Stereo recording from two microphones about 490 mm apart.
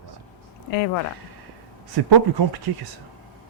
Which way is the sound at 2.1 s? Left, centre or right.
Right.